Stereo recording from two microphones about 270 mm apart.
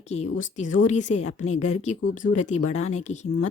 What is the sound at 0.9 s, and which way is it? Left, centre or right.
Speech, left.